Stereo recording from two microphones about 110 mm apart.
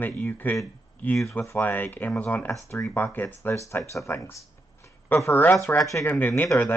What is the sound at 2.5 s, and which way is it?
Speech, 30° left (ahead or behind).